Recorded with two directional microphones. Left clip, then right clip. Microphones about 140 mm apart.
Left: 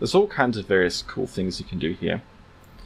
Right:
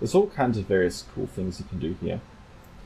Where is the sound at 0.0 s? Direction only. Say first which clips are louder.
Left 2 dB; 25° left (ahead or behind).